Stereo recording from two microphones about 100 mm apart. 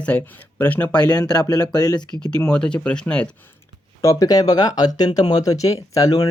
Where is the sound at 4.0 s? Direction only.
35° left (ahead or behind).